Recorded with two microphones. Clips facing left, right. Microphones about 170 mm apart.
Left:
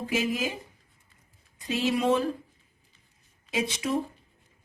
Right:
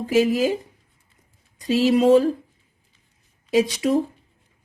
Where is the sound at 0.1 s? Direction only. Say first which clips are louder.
Right 11 dB; 35° right (ahead or behind).